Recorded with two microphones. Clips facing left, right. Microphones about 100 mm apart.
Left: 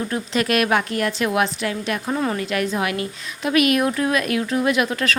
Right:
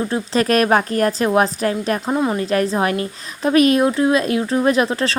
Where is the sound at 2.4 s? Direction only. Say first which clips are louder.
Right 5 dB; 35° right (ahead or behind).